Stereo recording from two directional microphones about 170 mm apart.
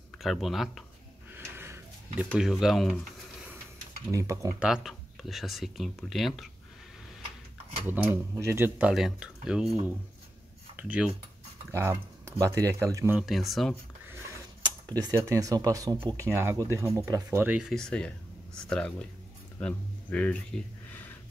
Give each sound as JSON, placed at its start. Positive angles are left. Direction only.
{"t": 0.2, "sound": "speech", "side_deg": 0}
{"t": 1.3, "sound": "a sound", "side_deg": -15}
{"t": 2.3, "sound": "speech", "side_deg": 0}
{"t": 4.1, "sound": "speech", "side_deg": -20}
{"t": 4.6, "sound": "speech", "side_deg": -5}
{"t": 7.8, "sound": "speech", "side_deg": -10}
{"t": 10.8, "sound": "speech", "side_deg": -5}
{"t": 13.2, "sound": "speech", "side_deg": 0}
{"t": 14.6, "sound": "speech", "side_deg": -25}